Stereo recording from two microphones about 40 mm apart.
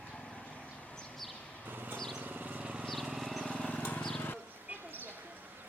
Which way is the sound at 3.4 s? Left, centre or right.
Left.